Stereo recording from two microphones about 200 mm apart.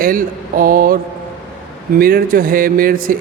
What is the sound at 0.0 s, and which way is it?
Speech, 45° right (ahead or behind).